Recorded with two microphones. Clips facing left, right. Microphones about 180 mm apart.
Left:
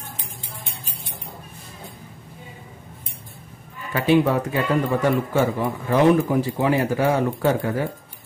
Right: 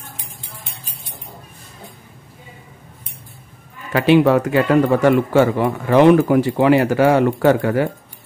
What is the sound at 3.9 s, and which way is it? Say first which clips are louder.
Speech: right 5 dB; 75° right (ahead or behind).